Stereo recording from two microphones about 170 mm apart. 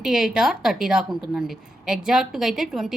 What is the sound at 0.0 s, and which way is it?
A woman's voice, 5° right (ahead or behind).